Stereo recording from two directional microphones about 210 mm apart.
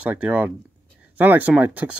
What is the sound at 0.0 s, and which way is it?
Speech, 5° right (ahead or behind).